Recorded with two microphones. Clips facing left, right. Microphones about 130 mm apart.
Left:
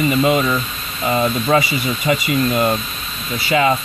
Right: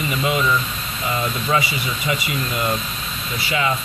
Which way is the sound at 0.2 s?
40° left (ahead or behind).